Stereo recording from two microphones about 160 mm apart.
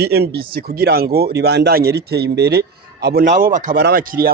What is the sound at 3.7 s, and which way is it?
Speech, 75° right (ahead or behind).